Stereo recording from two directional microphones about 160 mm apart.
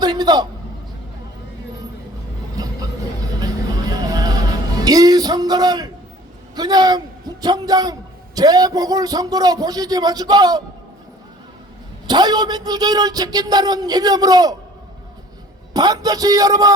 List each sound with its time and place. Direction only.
0.0 s a sound: 25° right (ahead or behind)
3.9 s music: 25° right (ahead or behind)
6.6 s a man's voice: 25° right (ahead or behind)
12.0 s speech: 25° right (ahead or behind)
15.7 s speech: 25° right (ahead or behind)